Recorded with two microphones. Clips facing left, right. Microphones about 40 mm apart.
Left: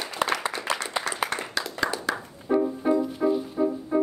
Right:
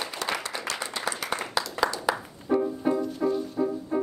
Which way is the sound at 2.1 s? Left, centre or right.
Centre.